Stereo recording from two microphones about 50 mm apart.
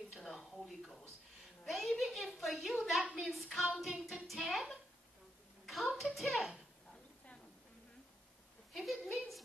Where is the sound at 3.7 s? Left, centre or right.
Centre.